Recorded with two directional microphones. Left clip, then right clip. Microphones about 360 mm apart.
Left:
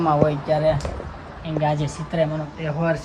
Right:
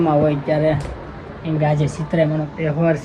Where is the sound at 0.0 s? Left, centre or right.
Centre.